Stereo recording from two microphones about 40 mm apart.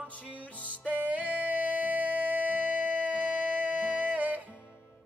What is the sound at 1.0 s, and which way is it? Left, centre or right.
Music, right.